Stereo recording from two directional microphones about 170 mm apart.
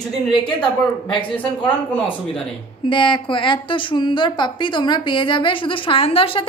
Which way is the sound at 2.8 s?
30° left (ahead or behind).